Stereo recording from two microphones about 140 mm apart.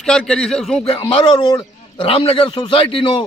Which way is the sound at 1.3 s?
30° left (ahead or behind).